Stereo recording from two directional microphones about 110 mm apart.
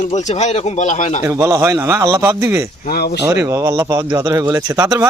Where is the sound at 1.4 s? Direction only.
30° right (ahead or behind).